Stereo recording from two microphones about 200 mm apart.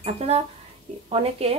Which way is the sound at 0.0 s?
30° right (ahead or behind).